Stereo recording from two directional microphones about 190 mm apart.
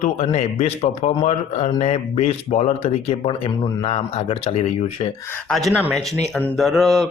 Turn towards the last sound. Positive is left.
turn(degrees=0)  # may be behind; listen again after turning